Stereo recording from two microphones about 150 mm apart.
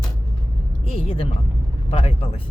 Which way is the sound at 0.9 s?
40° left (ahead or behind).